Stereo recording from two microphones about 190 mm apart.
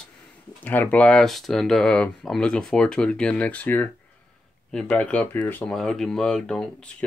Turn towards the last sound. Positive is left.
turn(degrees=5)  # may be behind; listen again after turning